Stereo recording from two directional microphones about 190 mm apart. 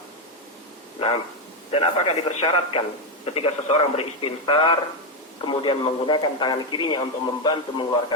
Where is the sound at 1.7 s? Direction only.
30° left (ahead or behind).